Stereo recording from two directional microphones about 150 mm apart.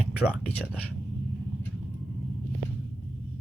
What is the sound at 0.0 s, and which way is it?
Speech, 10° left (ahead or behind).